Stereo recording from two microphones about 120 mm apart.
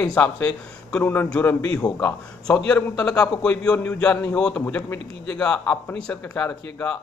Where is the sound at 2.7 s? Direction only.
5° left (ahead or behind).